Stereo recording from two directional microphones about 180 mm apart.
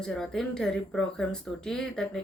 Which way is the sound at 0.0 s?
5° left (ahead or behind).